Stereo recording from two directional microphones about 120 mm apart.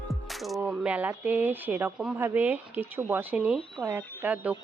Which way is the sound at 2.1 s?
20° right (ahead or behind).